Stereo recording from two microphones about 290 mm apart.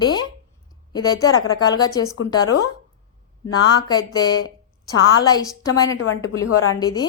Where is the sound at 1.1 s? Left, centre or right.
Left.